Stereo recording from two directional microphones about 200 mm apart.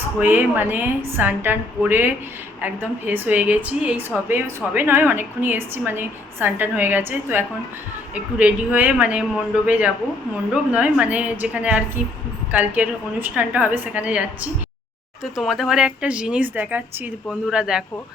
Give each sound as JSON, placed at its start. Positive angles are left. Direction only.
{"t": 0.2, "sound": "a woman's voice", "side_deg": -10}
{"t": 15.2, "sound": "speech", "side_deg": 0}